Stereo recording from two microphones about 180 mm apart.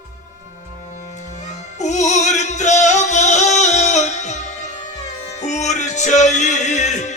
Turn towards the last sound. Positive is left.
turn(degrees=40)  # may be behind; listen again after turning